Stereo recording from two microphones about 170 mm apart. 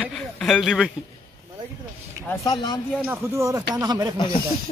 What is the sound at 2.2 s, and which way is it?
Speech, 20° left (ahead or behind).